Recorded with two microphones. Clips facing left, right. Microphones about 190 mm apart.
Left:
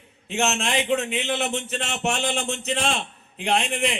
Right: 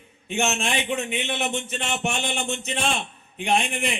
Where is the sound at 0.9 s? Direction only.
75° left (ahead or behind).